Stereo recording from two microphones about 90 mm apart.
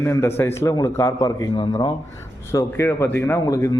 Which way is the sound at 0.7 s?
40° left (ahead or behind).